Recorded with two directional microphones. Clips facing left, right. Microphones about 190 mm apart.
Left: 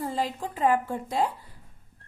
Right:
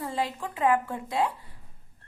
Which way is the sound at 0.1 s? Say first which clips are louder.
Left 1 dB; 35° left (ahead or behind).